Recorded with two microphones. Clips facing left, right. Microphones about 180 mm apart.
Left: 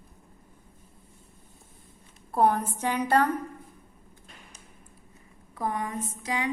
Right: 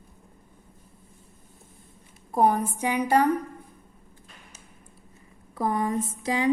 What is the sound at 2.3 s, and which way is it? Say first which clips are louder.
A woman's voice: right 1 dB; 15° right (ahead or behind).